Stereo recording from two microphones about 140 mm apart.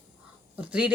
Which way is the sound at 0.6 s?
10° right (ahead or behind).